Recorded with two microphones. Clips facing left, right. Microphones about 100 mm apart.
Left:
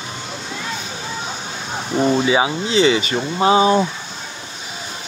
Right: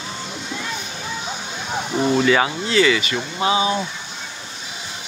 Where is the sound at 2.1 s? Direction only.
15° left (ahead or behind); by 3.8 s 35° left (ahead or behind).